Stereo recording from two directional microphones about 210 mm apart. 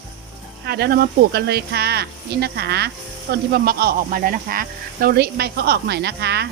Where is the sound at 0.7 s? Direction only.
50° right (ahead or behind).